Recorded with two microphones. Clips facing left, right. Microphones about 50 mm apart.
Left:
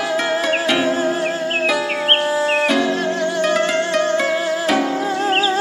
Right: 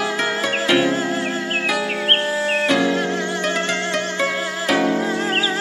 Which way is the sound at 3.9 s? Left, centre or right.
Centre.